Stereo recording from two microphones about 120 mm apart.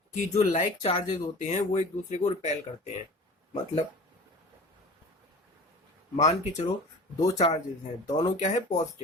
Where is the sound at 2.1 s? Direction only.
65° left (ahead or behind).